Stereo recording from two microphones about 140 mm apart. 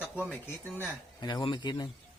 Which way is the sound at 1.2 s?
30° left (ahead or behind).